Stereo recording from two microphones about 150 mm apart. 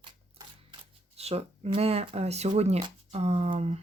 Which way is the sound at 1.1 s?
40° right (ahead or behind).